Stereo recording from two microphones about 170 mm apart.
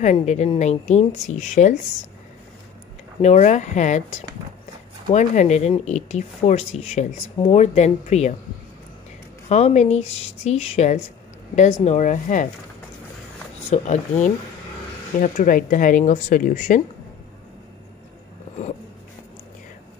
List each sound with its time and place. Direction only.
0.0 s speech: 45° left (ahead or behind)
3.2 s speech: 40° left (ahead or behind)
9.5 s speech: 40° left (ahead or behind)
13.7 s speech: 40° left (ahead or behind)